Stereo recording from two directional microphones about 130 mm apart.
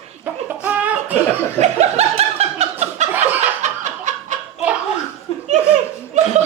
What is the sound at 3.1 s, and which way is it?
Chuckle, 15° right (ahead or behind).